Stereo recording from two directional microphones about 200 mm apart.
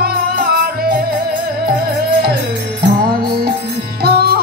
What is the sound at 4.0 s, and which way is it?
Music, 50° right (ahead or behind).